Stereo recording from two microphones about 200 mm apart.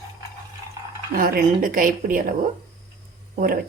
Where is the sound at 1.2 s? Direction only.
45° right (ahead or behind).